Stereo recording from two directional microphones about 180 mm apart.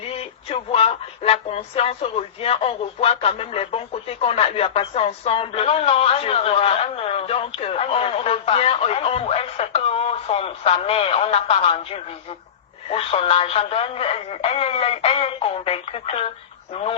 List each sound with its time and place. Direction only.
0.1 s speech: 35° left (ahead or behind)